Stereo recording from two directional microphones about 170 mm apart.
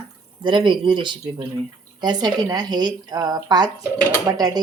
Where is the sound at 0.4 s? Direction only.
30° right (ahead or behind).